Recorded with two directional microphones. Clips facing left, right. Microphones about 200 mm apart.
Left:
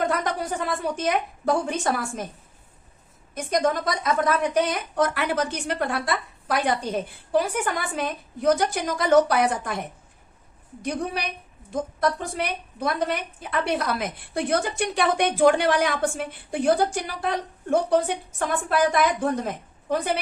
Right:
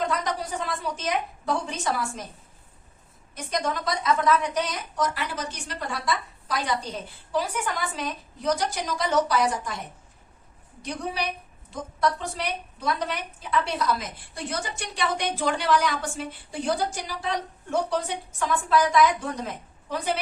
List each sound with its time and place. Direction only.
0.0 s a woman's voice: 55° left (ahead or behind)
3.3 s a woman's voice: 50° left (ahead or behind)
10.8 s a woman's voice: 55° left (ahead or behind)